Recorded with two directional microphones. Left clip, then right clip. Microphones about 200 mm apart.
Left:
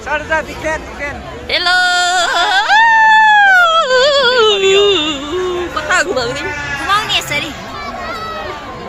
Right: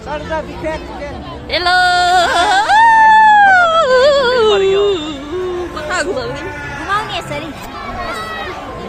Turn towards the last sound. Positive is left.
turn(degrees=-25)  # may be behind; listen again after turning